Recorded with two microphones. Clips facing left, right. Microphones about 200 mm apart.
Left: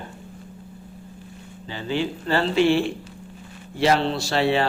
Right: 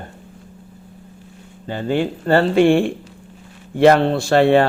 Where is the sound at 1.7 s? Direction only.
50° right (ahead or behind).